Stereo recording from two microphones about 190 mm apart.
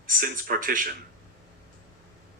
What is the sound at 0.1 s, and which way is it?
Speech, 45° right (ahead or behind).